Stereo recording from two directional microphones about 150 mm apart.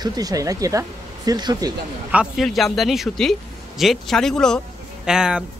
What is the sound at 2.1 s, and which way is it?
A man's voice, 10° right (ahead or behind).